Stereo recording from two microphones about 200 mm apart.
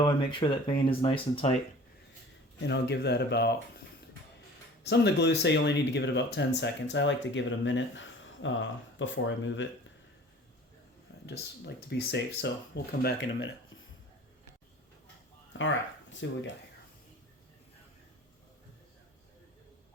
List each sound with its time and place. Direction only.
0.0 s speech: 25° left (ahead or behind)
2.6 s speech: 60° left (ahead or behind)
4.9 s speech: 55° left (ahead or behind)
11.3 s speech: 55° left (ahead or behind)
15.5 s speech: 70° left (ahead or behind)